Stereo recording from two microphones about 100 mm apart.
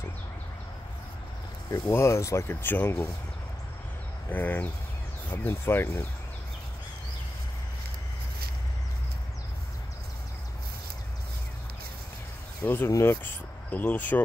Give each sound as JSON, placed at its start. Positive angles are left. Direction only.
{"t": 1.7, "sound": "speech", "side_deg": 30}
{"t": 4.3, "sound": "speech", "side_deg": 20}
{"t": 12.6, "sound": "speech", "side_deg": 25}